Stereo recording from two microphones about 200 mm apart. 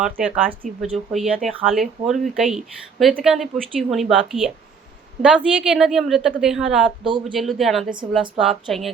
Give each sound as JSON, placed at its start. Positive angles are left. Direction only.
{"t": 0.0, "sound": "a woman's voice", "side_deg": -5}
{"t": 7.0, "sound": "speech", "side_deg": -25}
{"t": 7.3, "sound": "a woman's voice", "side_deg": 0}